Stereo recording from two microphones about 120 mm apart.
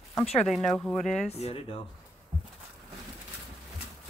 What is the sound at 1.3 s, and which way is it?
Speech, 60° left (ahead or behind).